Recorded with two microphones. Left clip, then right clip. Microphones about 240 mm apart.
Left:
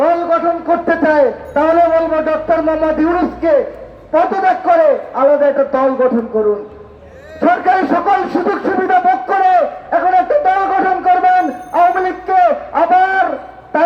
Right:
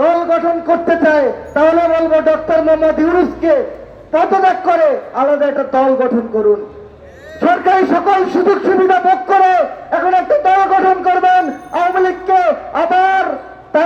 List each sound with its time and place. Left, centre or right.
0.0 s a man's voice: right
7.3 s a man's voice: right
12.3 s a sound: right